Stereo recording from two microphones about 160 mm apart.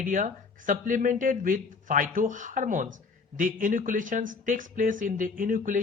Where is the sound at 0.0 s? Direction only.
55° right (ahead or behind).